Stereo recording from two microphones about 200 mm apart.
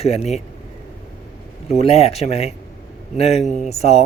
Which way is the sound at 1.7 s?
30° left (ahead or behind).